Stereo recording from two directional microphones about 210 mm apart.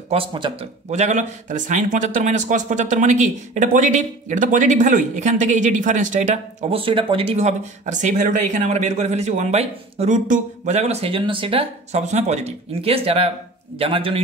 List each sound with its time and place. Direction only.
0.1 s a man's voice: 25° right (ahead or behind)